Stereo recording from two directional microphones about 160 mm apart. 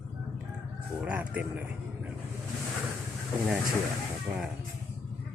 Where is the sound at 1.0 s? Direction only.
10° right (ahead or behind).